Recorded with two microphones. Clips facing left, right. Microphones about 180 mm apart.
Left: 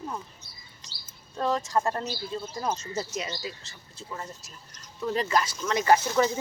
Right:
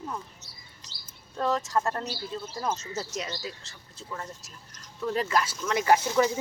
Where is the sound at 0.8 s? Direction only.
5° right (ahead or behind).